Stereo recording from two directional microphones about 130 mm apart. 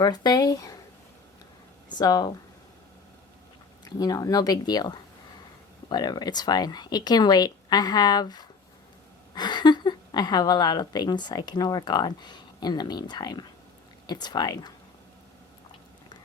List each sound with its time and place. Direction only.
0.0 s speech: 30° left (ahead or behind)
2.0 s a woman's voice: 30° left (ahead or behind)
3.8 s a woman's voice: 30° left (ahead or behind)